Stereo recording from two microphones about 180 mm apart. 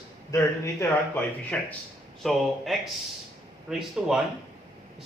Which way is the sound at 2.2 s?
Centre (ahead or behind).